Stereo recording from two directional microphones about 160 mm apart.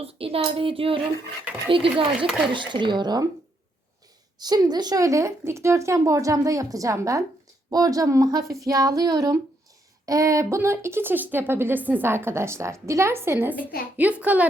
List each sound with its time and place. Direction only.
0.0 s a woman's voice: 35° right (ahead or behind)
4.4 s a woman's voice: 25° right (ahead or behind); by 14.4 s 10° right (ahead or behind)